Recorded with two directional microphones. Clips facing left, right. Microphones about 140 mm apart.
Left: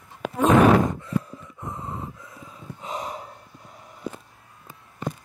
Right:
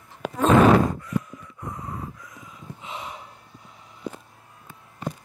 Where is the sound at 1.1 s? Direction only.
30° left (ahead or behind).